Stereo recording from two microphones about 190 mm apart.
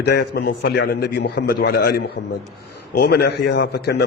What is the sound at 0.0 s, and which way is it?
A man's voice, 60° left (ahead or behind).